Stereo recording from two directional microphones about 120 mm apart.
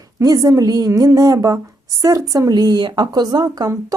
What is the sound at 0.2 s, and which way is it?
A woman's voice, 30° right (ahead or behind).